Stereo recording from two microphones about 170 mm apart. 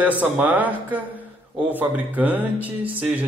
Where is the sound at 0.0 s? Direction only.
10° right (ahead or behind).